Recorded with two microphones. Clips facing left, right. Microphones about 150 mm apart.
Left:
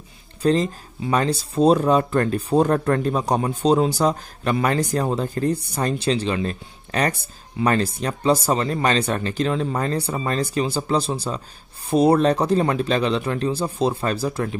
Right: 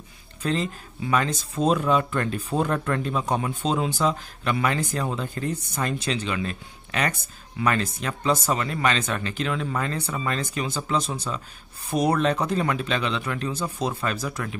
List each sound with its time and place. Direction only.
0.4 s speech: 35° left (ahead or behind)